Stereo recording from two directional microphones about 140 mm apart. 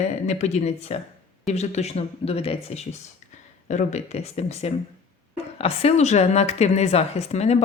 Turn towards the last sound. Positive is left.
turn(degrees=50)  # may be behind; listen again after turning